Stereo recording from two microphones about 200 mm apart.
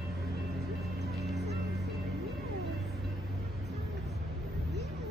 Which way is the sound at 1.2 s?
Centre (ahead or behind).